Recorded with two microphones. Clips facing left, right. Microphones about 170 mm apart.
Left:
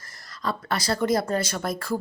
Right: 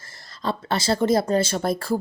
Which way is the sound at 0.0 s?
30° right (ahead or behind).